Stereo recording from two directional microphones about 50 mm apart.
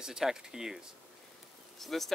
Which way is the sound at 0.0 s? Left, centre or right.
Centre.